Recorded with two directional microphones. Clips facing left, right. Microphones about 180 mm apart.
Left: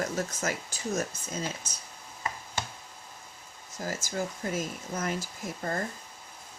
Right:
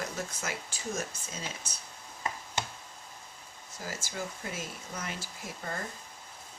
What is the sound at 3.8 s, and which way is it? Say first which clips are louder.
Speech: left 5 dB; 45° left (ahead or behind).